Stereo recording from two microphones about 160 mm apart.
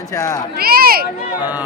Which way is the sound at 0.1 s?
20° left (ahead or behind).